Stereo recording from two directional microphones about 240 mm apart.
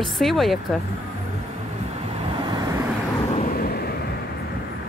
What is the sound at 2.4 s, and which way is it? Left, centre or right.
Vehicle, centre.